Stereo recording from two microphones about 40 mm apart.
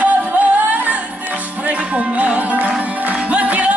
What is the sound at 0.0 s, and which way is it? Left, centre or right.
Music, right.